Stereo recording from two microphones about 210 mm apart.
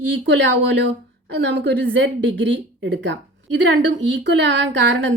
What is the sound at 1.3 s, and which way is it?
A woman's voice, 55° right (ahead or behind).